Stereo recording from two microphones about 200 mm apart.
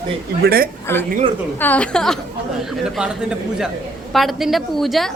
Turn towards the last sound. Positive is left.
turn(degrees=0)  # may be behind; listen again after turning